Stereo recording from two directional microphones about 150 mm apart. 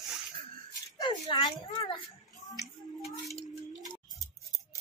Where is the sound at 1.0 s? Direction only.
30° left (ahead or behind).